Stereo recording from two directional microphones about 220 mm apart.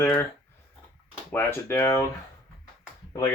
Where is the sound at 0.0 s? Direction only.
10° left (ahead or behind).